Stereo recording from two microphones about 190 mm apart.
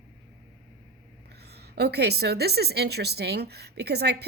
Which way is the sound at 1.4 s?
60° right (ahead or behind).